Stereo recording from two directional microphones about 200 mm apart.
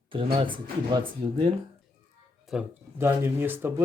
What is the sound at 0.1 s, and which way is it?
Speech, 25° right (ahead or behind).